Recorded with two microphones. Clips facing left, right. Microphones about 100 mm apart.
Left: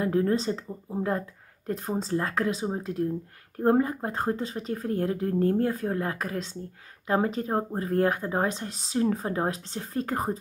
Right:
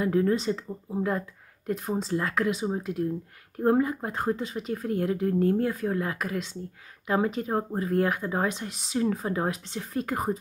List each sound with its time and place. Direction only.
0.0 s speech: 35° left (ahead or behind)